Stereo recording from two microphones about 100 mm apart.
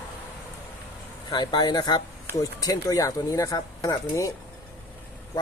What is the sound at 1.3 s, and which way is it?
Speech, 50° left (ahead or behind).